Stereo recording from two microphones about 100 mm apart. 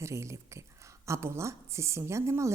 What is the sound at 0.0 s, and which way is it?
A woman's voice, 30° right (ahead or behind).